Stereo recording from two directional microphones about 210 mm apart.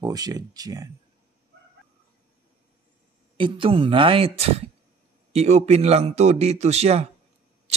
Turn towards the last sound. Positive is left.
turn(degrees=-30)  # may be behind; listen again after turning